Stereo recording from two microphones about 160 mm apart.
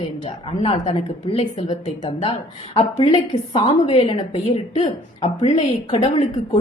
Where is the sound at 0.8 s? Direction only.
45° left (ahead or behind).